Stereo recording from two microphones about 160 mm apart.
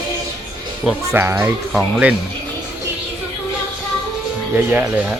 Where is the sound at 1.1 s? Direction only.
15° right (ahead or behind).